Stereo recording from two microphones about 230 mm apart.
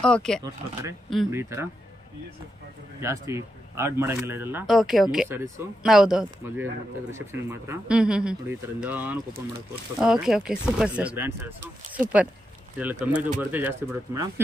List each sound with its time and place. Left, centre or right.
0.0 s speech: centre
1.3 s speech: centre
3.0 s speech: centre